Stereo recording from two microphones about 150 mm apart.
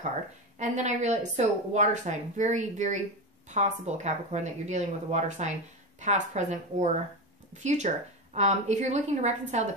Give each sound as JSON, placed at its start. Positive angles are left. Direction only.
{"t": 0.6, "sound": "speech", "side_deg": -50}